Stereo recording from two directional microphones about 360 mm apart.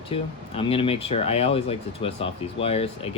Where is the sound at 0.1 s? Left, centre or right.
Centre.